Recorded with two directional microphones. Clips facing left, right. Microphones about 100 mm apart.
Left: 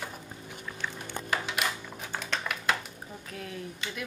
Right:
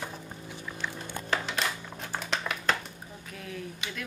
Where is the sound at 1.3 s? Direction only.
10° left (ahead or behind).